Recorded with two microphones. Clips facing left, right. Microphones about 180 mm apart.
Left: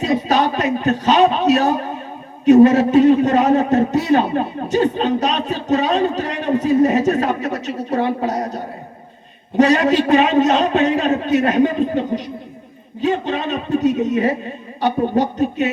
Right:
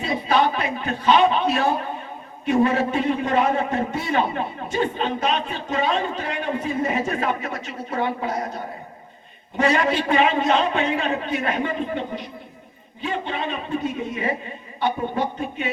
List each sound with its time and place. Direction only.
0.3 s a man's voice: 40° left (ahead or behind)
1.5 s a sound: 40° left (ahead or behind)
2.5 s a man's voice: 40° left (ahead or behind)